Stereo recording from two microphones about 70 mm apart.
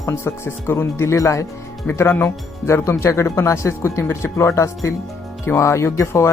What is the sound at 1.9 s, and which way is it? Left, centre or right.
Speech, left.